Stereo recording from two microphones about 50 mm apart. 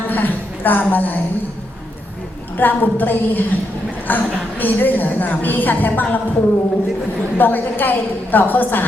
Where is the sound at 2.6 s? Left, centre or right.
Left.